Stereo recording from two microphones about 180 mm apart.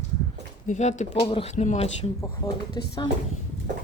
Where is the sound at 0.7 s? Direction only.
40° left (ahead or behind).